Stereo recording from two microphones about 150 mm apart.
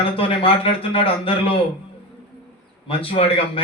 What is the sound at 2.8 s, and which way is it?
Speech, 40° left (ahead or behind).